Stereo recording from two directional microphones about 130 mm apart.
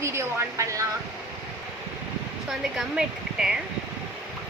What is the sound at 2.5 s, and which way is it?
Speech, 5° right (ahead or behind).